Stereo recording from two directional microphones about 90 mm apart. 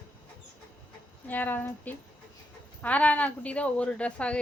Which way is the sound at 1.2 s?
20° left (ahead or behind).